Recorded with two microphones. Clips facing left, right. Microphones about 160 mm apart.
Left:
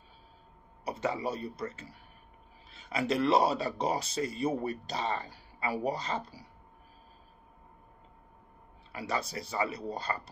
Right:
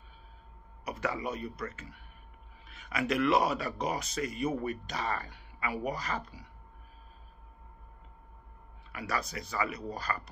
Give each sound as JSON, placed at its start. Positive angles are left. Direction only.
{"t": 0.8, "sound": "speech", "side_deg": 30}
{"t": 8.9, "sound": "speech", "side_deg": 25}